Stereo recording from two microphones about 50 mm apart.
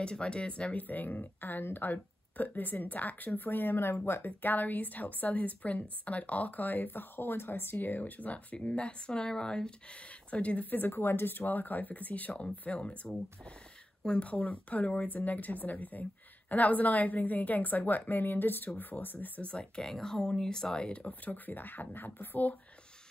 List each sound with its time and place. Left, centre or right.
0.0 s speech: left
8.5 s speech: left
10.3 s speech: left
10.9 s speech: left
14.0 s speech: left
19.5 s speech: centre; by 22.5 s left